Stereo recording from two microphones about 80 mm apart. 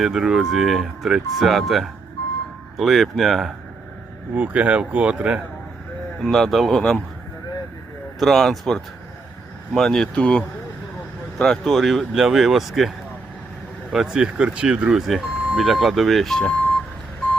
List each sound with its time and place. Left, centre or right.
0.0 s speech: centre
4.4 s speech: centre
6.2 s speech: centre
8.2 s speech: centre
13.9 s speech: centre